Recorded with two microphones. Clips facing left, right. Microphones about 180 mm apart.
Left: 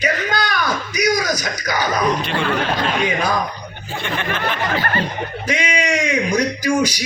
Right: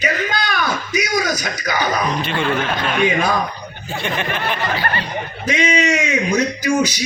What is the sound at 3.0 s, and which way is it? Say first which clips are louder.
Speech: right 2 dB; 25° right (ahead or behind).